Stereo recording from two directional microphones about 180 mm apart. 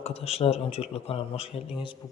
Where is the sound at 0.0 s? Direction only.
35° left (ahead or behind).